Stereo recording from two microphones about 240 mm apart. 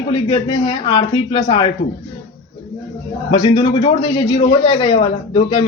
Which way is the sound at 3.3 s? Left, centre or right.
Centre.